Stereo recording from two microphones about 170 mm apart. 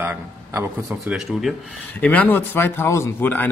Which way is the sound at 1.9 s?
10° left (ahead or behind).